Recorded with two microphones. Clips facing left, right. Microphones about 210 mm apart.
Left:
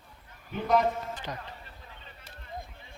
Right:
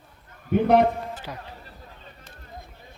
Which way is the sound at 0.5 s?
60° right (ahead or behind).